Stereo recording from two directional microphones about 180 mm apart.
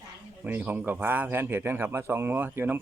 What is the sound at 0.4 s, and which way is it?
Speech, 10° right (ahead or behind).